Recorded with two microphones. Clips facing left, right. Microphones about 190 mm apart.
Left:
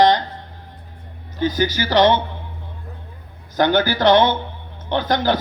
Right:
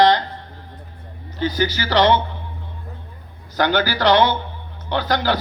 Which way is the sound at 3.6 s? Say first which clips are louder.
Left 2 dB; 20° left (ahead or behind).